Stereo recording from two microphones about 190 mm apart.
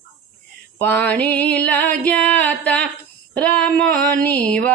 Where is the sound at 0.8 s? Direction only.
10° left (ahead or behind).